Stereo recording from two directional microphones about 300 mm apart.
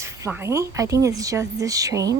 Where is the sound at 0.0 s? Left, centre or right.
Centre.